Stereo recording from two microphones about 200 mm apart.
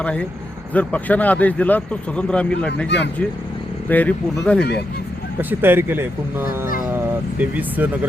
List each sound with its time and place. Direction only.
0.0 s speech: 5° left (ahead or behind)
2.8 s speech: 60° left (ahead or behind)
3.8 s speech: 10° left (ahead or behind)
5.4 s speech: 10° right (ahead or behind)
6.9 s vehicle: 10° right (ahead or behind)